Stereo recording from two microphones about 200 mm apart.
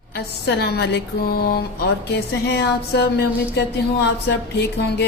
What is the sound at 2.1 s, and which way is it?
Speech, 55° left (ahead or behind).